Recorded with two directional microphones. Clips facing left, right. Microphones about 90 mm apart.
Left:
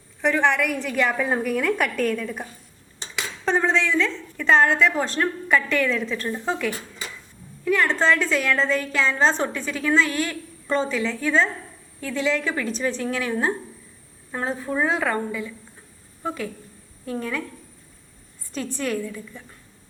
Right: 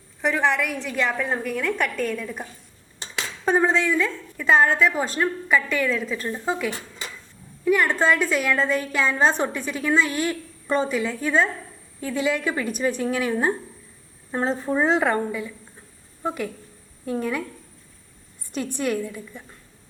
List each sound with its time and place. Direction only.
0.2 s a woman's voice: centre (ahead or behind)
3.4 s a woman's voice: 10° right (ahead or behind)
15.2 s a woman's voice: 10° right (ahead or behind)
18.8 s a woman's voice: 10° right (ahead or behind)